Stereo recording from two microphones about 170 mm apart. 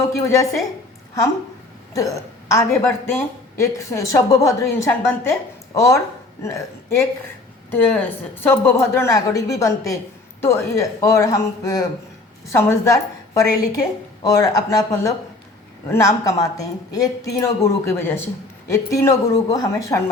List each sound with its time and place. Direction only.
0.0 s a woman's voice: 15° left (ahead or behind)
1.9 s a woman's voice: 20° left (ahead or behind)